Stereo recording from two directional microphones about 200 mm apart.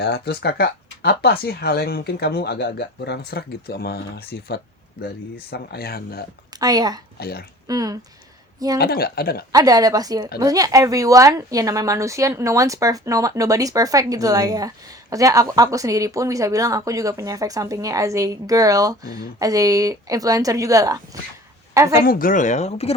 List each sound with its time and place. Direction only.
0.0 s speech: 55° left (ahead or behind)
6.5 s a woman's voice: 20° right (ahead or behind)
7.2 s speech: 50° left (ahead or behind)
7.7 s a woman's voice: 20° right (ahead or behind)
8.8 s speech: 50° left (ahead or behind)
9.5 s a woman's voice: 20° right (ahead or behind)
22.0 s speech: 45° left (ahead or behind)